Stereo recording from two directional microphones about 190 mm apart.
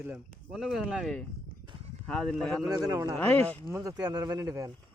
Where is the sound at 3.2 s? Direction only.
10° left (ahead or behind).